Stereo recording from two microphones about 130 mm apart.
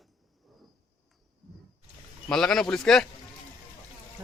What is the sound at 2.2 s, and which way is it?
Speech, 5° left (ahead or behind).